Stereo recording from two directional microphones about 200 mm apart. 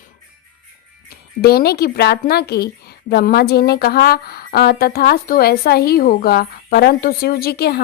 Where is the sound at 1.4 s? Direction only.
50° left (ahead or behind).